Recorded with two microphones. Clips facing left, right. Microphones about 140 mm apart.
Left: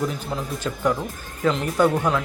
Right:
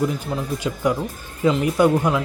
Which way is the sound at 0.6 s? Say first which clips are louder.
Even; 10° right (ahead or behind).